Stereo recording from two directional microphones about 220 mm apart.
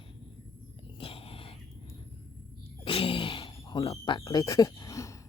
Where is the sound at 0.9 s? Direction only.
25° left (ahead or behind).